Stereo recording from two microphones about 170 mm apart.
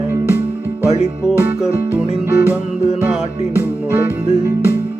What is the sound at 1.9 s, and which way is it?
Music, 10° right (ahead or behind).